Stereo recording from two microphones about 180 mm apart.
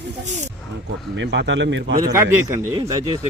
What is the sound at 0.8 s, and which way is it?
A man's voice, 75° right (ahead or behind).